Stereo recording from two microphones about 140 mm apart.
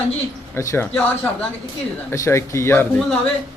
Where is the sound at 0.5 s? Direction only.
20° left (ahead or behind).